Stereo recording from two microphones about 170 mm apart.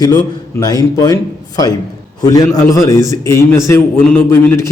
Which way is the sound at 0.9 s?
20° left (ahead or behind).